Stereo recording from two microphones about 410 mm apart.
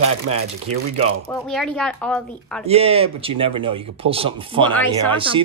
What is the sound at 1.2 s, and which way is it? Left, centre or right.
A woman's voice, centre.